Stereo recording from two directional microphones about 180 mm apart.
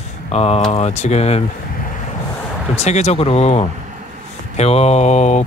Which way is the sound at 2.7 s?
40° left (ahead or behind).